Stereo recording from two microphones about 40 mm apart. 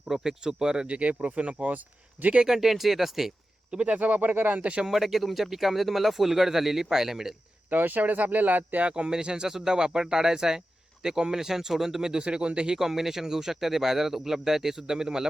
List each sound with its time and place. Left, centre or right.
0.1 s speech: centre
0.9 s speech: right
2.4 s speech: centre
3.8 s speech: right
4.9 s speech: centre
7.7 s speech: right
8.9 s speech: centre
12.1 s speech: right
12.7 s speech: centre